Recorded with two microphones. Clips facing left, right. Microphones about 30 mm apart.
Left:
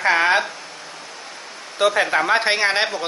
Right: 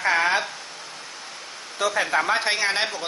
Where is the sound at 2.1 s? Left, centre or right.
Left.